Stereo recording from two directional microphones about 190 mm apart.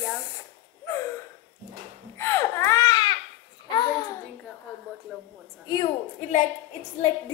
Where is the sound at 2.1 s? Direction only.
15° left (ahead or behind).